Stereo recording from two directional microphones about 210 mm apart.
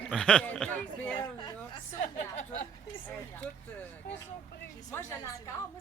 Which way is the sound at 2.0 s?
35° left (ahead or behind).